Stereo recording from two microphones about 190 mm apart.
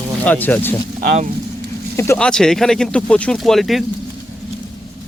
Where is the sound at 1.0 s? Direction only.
45° right (ahead or behind).